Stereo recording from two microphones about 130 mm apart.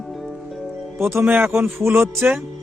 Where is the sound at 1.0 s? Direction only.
20° right (ahead or behind).